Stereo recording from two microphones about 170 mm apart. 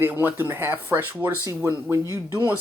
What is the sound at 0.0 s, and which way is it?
Speech, 10° right (ahead or behind).